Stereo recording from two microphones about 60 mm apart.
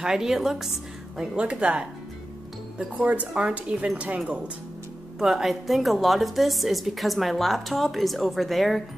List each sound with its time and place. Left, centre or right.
0.0 s a woman's voice: centre
3.0 s speech: right
5.2 s a woman's voice: centre